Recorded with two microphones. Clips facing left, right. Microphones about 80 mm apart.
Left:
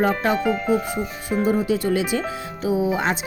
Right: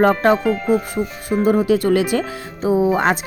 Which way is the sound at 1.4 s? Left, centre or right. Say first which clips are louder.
Right 5 dB; right.